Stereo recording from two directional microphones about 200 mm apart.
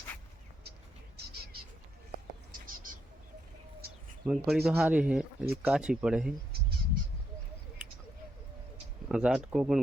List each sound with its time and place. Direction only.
2.5 s a sound: 45° right (ahead or behind)
4.3 s speech: centre (ahead or behind)
9.0 s speech: 5° right (ahead or behind)